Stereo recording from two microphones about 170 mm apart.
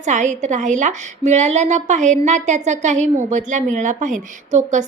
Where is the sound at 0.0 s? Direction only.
45° right (ahead or behind).